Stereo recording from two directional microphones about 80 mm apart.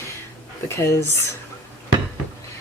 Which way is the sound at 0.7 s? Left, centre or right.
Left.